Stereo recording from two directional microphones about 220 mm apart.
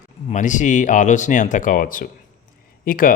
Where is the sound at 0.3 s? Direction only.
35° left (ahead or behind).